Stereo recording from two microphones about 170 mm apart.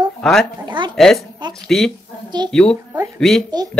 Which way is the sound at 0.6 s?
25° right (ahead or behind).